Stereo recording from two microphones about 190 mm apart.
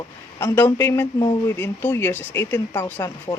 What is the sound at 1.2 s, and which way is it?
Speech, 20° left (ahead or behind).